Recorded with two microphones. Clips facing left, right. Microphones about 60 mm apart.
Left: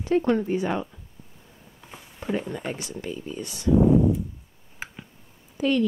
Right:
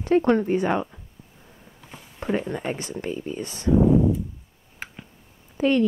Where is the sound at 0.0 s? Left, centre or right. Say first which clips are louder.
Right 3 dB; right.